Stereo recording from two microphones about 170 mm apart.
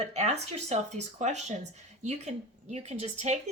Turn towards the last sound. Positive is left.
turn(degrees=-40)  # may be behind; listen again after turning